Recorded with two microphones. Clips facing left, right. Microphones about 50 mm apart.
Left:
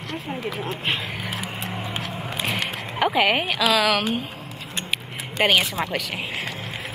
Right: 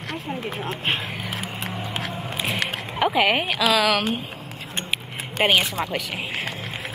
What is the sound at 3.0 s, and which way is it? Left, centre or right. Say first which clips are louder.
A woman's voice: even; centre.